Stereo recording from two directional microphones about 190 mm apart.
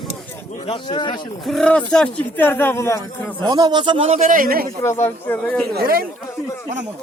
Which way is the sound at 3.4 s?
20° right (ahead or behind).